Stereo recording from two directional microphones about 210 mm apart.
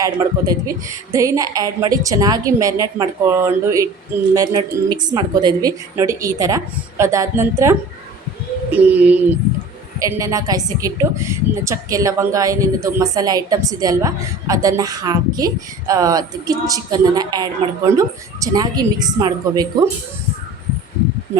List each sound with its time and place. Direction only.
0.0 s a woman's voice: 15° right (ahead or behind)